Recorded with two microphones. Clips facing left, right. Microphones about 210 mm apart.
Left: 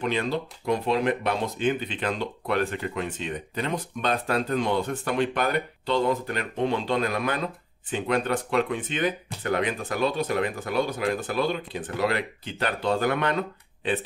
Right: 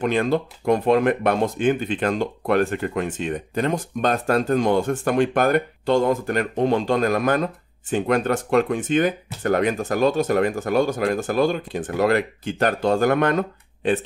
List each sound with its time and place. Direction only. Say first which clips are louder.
0.0 s speech: right 6 dB; 50° right (ahead or behind)